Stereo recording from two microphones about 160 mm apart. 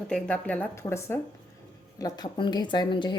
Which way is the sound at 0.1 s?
10° left (ahead or behind).